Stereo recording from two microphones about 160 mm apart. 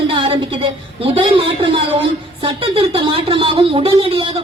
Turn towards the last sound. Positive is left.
turn(degrees=-35)  # may be behind; listen again after turning